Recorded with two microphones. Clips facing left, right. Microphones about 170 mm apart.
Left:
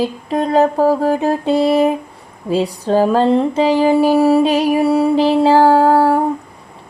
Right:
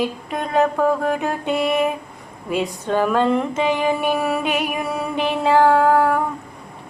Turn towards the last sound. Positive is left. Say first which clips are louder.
# left 4 dB
turn(degrees=30)  # may be behind; listen again after turning